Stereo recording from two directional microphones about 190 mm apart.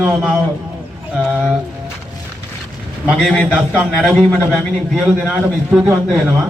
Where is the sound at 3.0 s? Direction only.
Centre (ahead or behind).